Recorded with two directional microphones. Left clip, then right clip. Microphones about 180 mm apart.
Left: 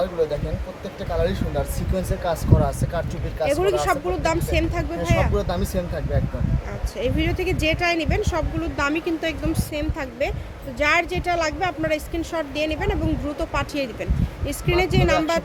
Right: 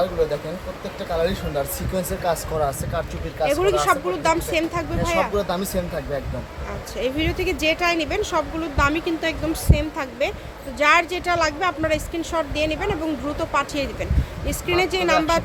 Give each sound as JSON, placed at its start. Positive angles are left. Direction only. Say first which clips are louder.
{"t": 1.1, "sound": "a woman's voice", "louder": "right 1 dB", "side_deg": 15}
{"t": 3.4, "sound": "speech", "louder": "right 2 dB", "side_deg": 5}
{"t": 7.0, "sound": "a woman's voice", "louder": "right 1 dB", "side_deg": 5}